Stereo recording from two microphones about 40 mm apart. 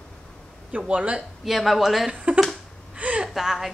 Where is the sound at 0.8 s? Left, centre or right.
Right.